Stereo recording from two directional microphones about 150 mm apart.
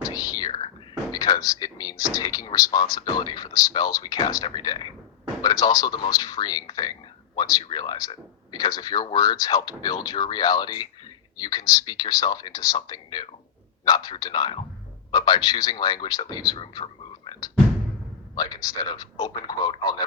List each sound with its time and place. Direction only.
0.1 s whispering: 25° left (ahead or behind)
1.1 s a sound: 25° left (ahead or behind)
2.1 s speech: 25° left (ahead or behind)
16.6 s frog: 35° left (ahead or behind)
18.3 s speech: 25° left (ahead or behind)